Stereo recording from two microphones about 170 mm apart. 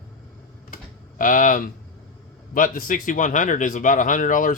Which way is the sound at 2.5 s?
50° left (ahead or behind).